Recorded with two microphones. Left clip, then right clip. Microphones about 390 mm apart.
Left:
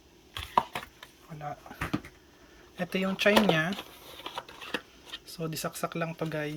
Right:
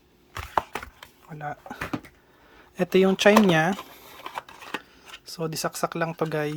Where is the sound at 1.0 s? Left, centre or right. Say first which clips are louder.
Right 5 dB; centre.